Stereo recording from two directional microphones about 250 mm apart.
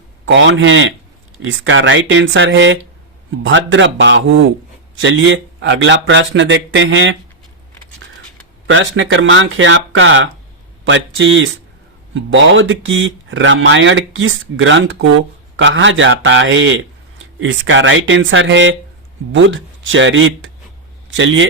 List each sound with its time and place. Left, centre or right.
0.3 s speech: right
8.6 s speech: right